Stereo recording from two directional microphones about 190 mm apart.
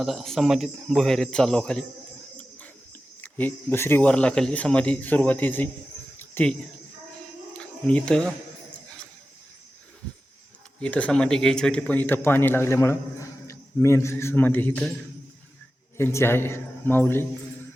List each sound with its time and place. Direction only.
0.0 s speech: centre (ahead or behind)
3.2 s a man's voice: 10° left (ahead or behind)
6.1 s cricket: 10° left (ahead or behind)
7.5 s a sound: 5° left (ahead or behind)
10.8 s a man's voice: 5° left (ahead or behind)
16.0 s a man's voice: 15° left (ahead or behind)